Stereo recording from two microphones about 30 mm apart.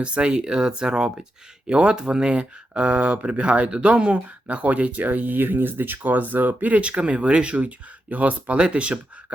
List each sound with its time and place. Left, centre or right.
0.0 s speech: right
4.6 s speech: right
5.0 s speech: right
6.8 s speech: right
8.1 s speech: right
8.5 s speech: right